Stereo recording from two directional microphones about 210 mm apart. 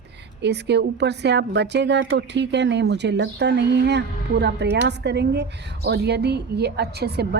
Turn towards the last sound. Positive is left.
turn(degrees=-50)  # may be behind; listen again after turning